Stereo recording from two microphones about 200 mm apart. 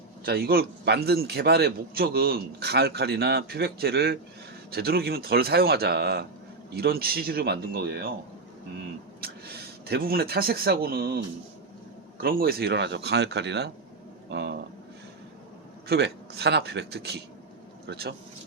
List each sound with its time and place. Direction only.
0.3 s a man's voice: 50° right (ahead or behind)
9.2 s speech: 50° right (ahead or behind)
12.2 s speech: 50° right (ahead or behind)
14.3 s a sound: 60° right (ahead or behind)
15.9 s speech: 55° right (ahead or behind)